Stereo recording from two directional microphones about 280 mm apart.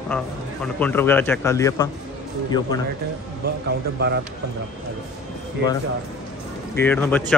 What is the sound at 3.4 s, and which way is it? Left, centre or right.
Speech, right.